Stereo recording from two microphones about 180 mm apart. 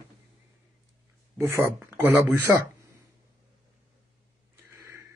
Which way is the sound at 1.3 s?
15° right (ahead or behind).